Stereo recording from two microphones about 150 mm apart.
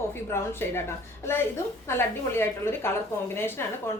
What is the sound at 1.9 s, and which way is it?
A woman's voice, 15° left (ahead or behind).